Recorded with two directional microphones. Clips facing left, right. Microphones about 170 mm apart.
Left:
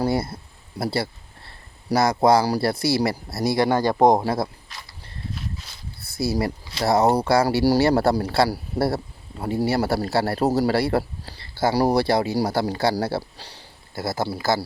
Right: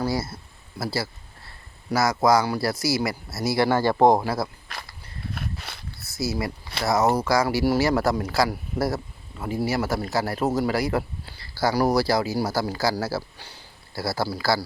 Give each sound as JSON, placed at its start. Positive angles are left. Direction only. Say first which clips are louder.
{"t": 0.8, "sound": "speech", "louder": "left 3 dB", "side_deg": 30}
{"t": 3.5, "sound": "speech", "louder": "left 1 dB", "side_deg": 20}
{"t": 4.7, "sound": "a sound", "louder": "right 2 dB", "side_deg": -60}
{"t": 6.1, "sound": "a man's voice", "louder": "left 4 dB", "side_deg": 30}